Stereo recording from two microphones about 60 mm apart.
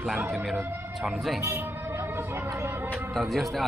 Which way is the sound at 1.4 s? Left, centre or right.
Right.